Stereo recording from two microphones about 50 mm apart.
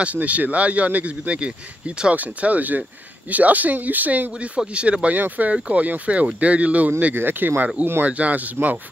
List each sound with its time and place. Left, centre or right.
0.0 s speech: right
7.2 s speech: right